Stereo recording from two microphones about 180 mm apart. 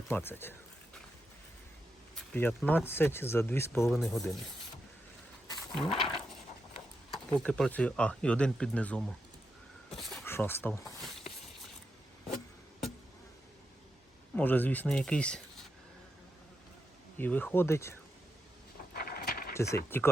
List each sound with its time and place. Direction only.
0.1 s speech: 10° left (ahead or behind)
2.1 s speech: 10° left (ahead or behind)
3.9 s speech: centre (ahead or behind)
5.7 s a sound: centre (ahead or behind)
7.1 s speech: 5° left (ahead or behind)
9.9 s a sound: centre (ahead or behind)
10.2 s speech: 15° left (ahead or behind)
14.3 s speech: 10° left (ahead or behind)
17.2 s speech: 10° left (ahead or behind)
18.9 s a sound: 55° left (ahead or behind)
19.5 s speech: 15° left (ahead or behind)